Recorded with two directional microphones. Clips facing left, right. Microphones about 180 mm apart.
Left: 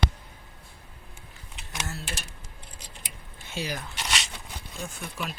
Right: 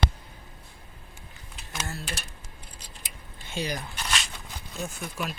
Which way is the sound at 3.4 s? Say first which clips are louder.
Right 2 dB; 5° left (ahead or behind).